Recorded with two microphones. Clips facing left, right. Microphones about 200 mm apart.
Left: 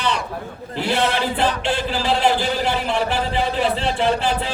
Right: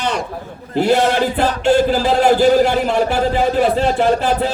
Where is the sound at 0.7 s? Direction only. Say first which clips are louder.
Right 7 dB; 45° right (ahead or behind).